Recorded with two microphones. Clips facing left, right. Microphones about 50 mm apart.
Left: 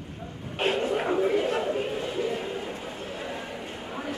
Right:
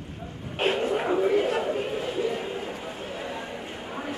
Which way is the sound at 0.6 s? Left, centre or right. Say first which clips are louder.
Right 1 dB; centre.